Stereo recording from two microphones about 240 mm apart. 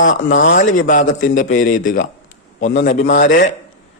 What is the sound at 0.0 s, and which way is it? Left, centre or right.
A man's voice, left.